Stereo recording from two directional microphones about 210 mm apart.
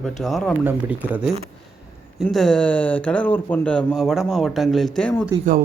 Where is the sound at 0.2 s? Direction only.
Centre (ahead or behind).